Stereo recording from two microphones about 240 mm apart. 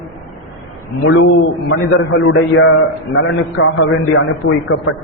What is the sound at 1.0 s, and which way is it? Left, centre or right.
A man's voice, left.